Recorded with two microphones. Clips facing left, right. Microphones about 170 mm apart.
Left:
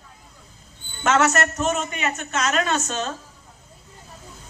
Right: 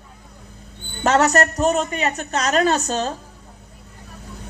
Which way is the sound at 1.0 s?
35° right (ahead or behind).